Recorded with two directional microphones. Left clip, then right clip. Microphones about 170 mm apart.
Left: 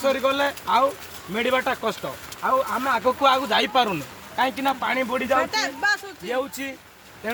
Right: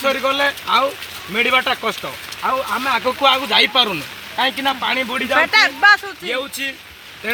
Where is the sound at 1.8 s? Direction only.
15° left (ahead or behind).